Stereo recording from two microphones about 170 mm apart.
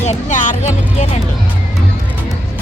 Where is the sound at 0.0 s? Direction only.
45° left (ahead or behind).